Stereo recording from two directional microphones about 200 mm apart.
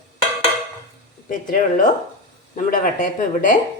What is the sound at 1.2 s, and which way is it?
Speech, 40° left (ahead or behind).